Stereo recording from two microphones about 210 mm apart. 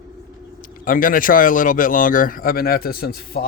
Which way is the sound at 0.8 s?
40° left (ahead or behind).